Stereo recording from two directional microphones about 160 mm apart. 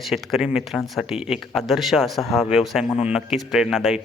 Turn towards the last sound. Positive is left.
turn(degrees=0)  # may be behind; listen again after turning